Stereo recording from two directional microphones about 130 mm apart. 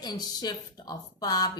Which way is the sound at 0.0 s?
30° left (ahead or behind).